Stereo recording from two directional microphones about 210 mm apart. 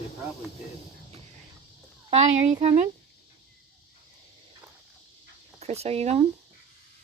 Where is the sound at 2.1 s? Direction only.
30° right (ahead or behind).